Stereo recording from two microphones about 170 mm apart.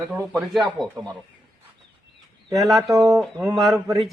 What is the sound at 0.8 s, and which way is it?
Speech, centre (ahead or behind).